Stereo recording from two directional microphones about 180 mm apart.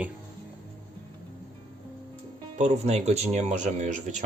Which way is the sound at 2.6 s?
40° right (ahead or behind).